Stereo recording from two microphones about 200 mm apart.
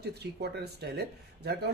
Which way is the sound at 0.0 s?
55° right (ahead or behind).